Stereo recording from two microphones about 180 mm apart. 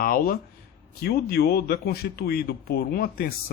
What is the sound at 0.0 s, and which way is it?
Speech, 55° left (ahead or behind).